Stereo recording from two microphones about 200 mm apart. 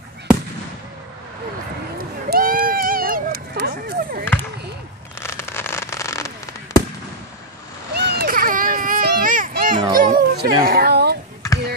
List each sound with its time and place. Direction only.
2.0 s a sound: 45° right (ahead or behind)
4.2 s basketball bounce: 10° left (ahead or behind)
5.2 s fireworks: 10° left (ahead or behind)
7.9 s baby cry: 55° right (ahead or behind)
9.9 s music: 45° right (ahead or behind)
10.6 s a sound: 50° right (ahead or behind)